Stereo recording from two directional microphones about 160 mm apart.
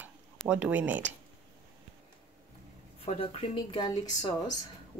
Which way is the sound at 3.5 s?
25° left (ahead or behind).